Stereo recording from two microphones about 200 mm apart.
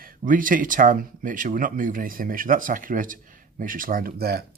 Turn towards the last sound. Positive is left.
turn(degrees=-50)  # may be behind; listen again after turning